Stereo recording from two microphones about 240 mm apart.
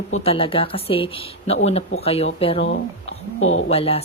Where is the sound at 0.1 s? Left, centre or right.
Left.